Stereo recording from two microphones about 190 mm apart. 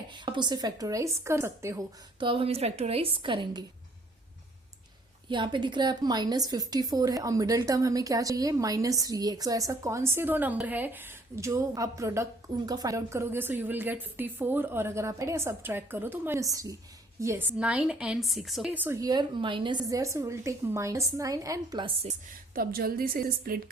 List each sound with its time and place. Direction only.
0.1 s a woman's voice: 25° right (ahead or behind)
2.1 s a woman's voice: 25° right (ahead or behind)
5.3 s a woman's voice: 25° right (ahead or behind)
22.5 s a woman's voice: 50° right (ahead or behind)